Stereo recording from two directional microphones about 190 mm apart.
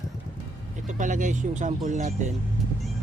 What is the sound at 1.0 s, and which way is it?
Vehicle, 40° right (ahead or behind).